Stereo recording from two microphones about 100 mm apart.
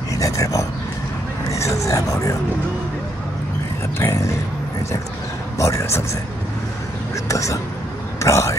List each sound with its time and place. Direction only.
0.1 s a sound: 35° left (ahead or behind)
1.5 s speech: 30° left (ahead or behind)
4.0 s speech: 25° left (ahead or behind)
5.6 s speech: 30° left (ahead or behind)
7.2 s speech: 30° left (ahead or behind)